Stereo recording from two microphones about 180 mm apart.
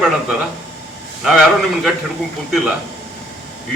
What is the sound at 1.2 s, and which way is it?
Speech, centre (ahead or behind).